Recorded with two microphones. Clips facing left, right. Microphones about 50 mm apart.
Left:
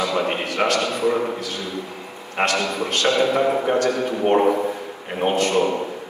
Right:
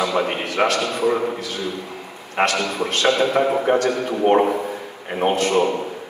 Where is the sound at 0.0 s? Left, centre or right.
Right.